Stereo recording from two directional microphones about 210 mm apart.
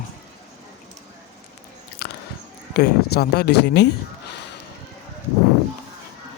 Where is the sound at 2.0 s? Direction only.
50° left (ahead or behind).